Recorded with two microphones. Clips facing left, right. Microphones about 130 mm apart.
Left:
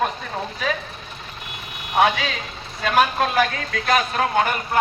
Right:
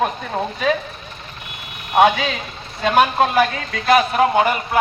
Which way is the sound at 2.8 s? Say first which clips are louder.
Right 4 dB; 20° right (ahead or behind).